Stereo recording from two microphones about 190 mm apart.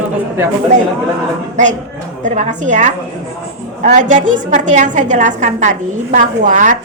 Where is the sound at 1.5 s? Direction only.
40° right (ahead or behind).